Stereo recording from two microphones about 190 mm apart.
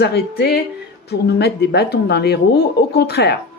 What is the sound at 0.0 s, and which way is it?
Speech, 60° left (ahead or behind).